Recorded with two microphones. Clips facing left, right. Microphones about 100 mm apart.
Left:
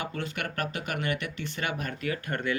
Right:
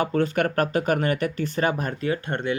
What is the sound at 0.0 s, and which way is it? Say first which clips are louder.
Speech: right 12 dB; 40° right (ahead or behind).